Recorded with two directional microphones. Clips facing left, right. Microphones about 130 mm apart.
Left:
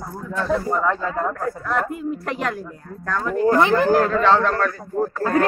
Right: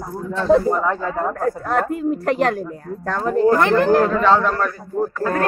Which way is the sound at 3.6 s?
10° left (ahead or behind).